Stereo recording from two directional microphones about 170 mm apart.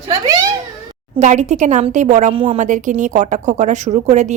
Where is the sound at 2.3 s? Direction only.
30° right (ahead or behind).